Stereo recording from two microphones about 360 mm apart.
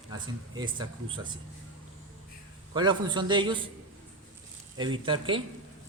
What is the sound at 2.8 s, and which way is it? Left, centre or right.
Speech, centre.